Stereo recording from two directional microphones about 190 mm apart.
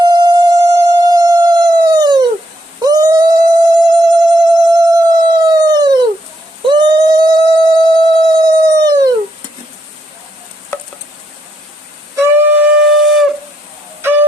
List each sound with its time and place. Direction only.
0.0 s music: 20° right (ahead or behind)
6.7 s a sound: 25° right (ahead or behind)
12.1 s wind instrument: 10° right (ahead or behind)
14.0 s music: 10° right (ahead or behind)